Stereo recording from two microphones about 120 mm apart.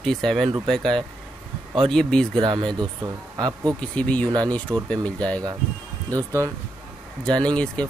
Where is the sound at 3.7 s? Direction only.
10° left (ahead or behind).